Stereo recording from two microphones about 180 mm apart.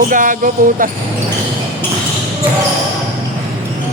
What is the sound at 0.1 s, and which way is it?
Speech, 50° right (ahead or behind).